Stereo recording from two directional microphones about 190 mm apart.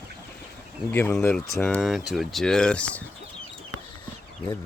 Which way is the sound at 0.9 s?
10° left (ahead or behind).